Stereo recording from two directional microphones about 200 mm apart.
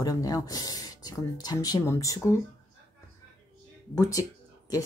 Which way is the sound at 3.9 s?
15° left (ahead or behind).